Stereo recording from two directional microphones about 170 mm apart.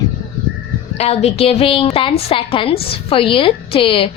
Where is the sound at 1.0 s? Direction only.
35° left (ahead or behind).